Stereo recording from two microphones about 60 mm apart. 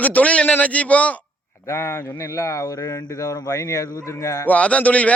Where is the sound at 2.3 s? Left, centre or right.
Left.